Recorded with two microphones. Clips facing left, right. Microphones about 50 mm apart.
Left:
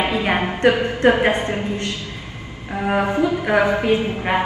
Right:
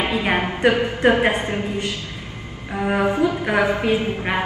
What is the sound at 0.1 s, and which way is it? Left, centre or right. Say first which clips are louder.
A woman's voice: left 1 dB; centre.